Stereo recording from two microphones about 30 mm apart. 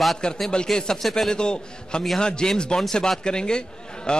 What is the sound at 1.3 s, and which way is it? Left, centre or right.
A man's voice, left.